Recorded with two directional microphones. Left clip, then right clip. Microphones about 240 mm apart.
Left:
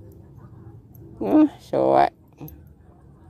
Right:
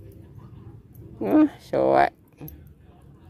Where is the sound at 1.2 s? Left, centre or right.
Centre.